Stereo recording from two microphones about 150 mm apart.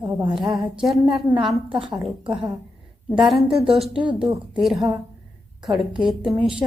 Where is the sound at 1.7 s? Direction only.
35° right (ahead or behind).